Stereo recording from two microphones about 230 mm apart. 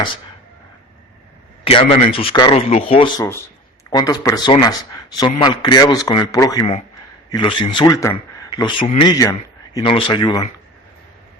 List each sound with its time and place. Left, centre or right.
1.6 s a man's voice: left